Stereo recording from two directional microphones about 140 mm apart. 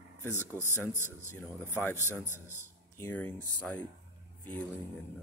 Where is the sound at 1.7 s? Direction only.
15° left (ahead or behind).